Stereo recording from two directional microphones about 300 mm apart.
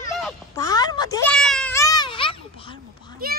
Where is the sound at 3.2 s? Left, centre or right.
Right.